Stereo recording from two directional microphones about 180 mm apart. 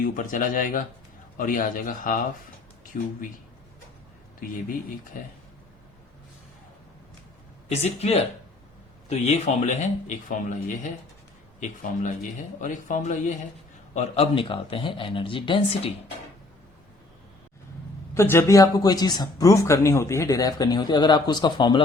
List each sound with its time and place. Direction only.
0.0 s speech: 45° left (ahead or behind)
7.7 s speech: 35° left (ahead or behind)
11.6 s speech: 45° left (ahead or behind); by 15.9 s 30° left (ahead or behind)
18.1 s speech: 15° left (ahead or behind)